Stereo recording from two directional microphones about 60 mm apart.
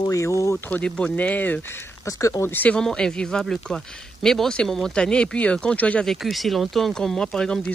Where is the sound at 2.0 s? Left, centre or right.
Left.